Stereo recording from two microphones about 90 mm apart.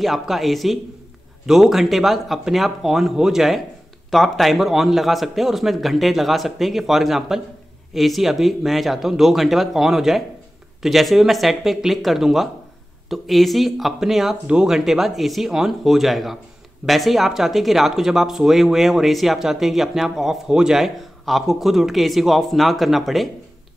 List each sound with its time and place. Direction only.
0.0 s speech: centre (ahead or behind)